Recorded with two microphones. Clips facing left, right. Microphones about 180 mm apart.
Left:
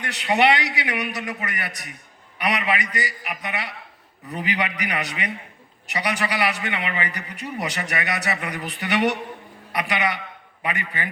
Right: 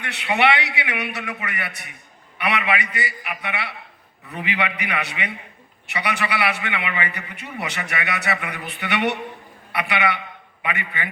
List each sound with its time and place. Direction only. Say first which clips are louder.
0.0 s a man's voice: left 1 dB; 40° left (ahead or behind)